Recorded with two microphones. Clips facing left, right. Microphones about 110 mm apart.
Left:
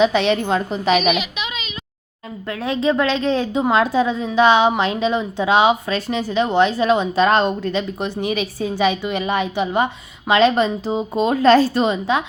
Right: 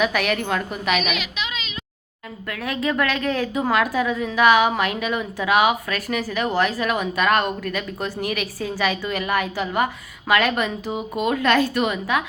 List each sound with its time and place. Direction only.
0.0 s a woman's voice: 25° left (ahead or behind)
1.1 s child singing: centre (ahead or behind)
2.5 s a woman's voice: 25° left (ahead or behind)